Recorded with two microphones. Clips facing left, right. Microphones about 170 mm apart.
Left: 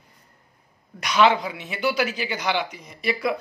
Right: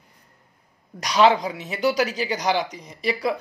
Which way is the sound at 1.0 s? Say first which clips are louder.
Right 1 dB; 35° right (ahead or behind).